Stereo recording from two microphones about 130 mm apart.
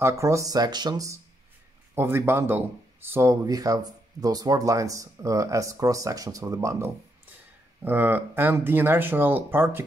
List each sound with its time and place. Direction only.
0.0 s speech: 20° right (ahead or behind)